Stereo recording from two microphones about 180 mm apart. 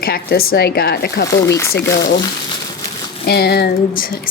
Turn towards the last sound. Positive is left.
turn(degrees=60)  # may be behind; listen again after turning